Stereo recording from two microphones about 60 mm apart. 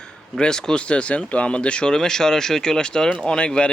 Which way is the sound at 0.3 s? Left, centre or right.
Centre.